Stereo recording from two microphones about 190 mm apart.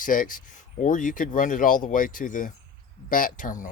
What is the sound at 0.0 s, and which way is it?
Speech, 45° left (ahead or behind).